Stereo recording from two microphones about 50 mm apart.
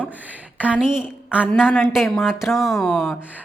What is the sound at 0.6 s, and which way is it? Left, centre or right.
Speech, right.